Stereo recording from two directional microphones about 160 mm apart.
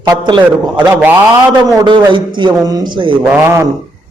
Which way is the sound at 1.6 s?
30° right (ahead or behind).